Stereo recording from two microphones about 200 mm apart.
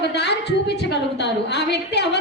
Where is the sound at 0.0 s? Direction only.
55° left (ahead or behind).